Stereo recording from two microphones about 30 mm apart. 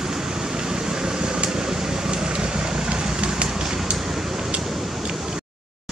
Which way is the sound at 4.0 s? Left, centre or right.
Centre.